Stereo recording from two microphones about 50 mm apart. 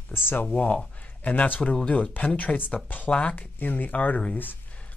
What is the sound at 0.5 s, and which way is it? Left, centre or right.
Speech, left.